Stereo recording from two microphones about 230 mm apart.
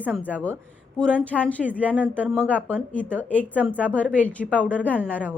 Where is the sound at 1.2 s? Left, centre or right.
Centre.